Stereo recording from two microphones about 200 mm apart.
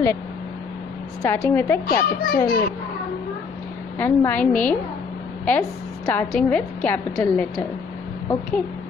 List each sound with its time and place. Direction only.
1.2 s a woman's voice: 10° left (ahead or behind)
1.9 s a child's voice: 45° left (ahead or behind)
4.0 s a woman's voice: 10° left (ahead or behind)